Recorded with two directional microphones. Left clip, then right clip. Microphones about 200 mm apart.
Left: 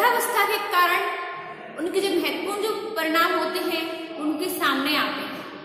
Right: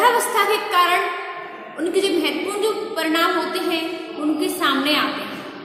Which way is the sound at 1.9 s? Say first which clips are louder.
Right 4 dB; 15° right (ahead or behind).